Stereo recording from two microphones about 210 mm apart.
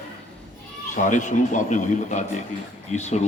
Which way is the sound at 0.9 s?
35° left (ahead or behind).